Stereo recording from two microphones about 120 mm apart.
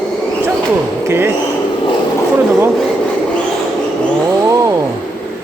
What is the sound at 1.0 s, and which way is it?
Speech, 20° right (ahead or behind).